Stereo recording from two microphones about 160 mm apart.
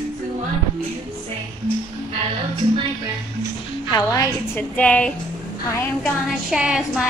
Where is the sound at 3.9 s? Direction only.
20° left (ahead or behind).